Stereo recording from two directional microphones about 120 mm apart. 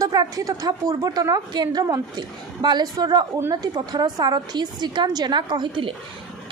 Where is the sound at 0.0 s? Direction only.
30° right (ahead or behind).